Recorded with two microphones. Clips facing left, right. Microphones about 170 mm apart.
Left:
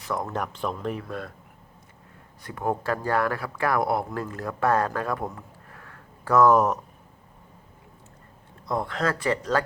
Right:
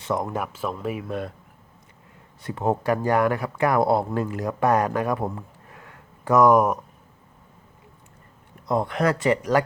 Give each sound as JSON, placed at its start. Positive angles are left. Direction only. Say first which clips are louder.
{"t": 0.0, "sound": "speech", "louder": "right 4 dB", "side_deg": -20}
{"t": 0.3, "sound": "speech", "louder": "right 1 dB", "side_deg": -5}
{"t": 1.0, "sound": "speech", "louder": "right 5 dB", "side_deg": -20}
{"t": 2.4, "sound": "speech", "louder": "right 4 dB", "side_deg": -25}
{"t": 8.6, "sound": "speech", "louder": "right 4 dB", "side_deg": -20}